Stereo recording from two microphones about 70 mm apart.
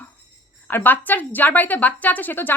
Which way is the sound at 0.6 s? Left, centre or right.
Left.